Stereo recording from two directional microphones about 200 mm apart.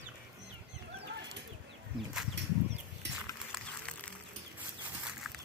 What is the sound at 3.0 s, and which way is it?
Horse, 60° right (ahead or behind).